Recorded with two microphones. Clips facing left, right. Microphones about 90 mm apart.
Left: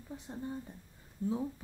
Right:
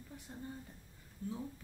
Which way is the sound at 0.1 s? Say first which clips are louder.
Left 8 dB; 25° left (ahead or behind).